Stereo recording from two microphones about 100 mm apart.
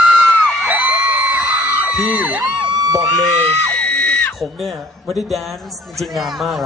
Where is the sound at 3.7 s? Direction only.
10° left (ahead or behind).